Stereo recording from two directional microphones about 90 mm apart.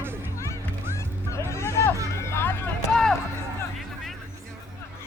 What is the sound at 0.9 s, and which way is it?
Music, 30° left (ahead or behind).